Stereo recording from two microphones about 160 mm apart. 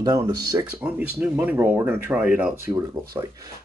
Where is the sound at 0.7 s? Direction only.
10° right (ahead or behind).